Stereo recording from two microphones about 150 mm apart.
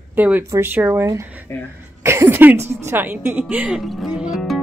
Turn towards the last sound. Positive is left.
turn(degrees=0)  # may be behind; listen again after turning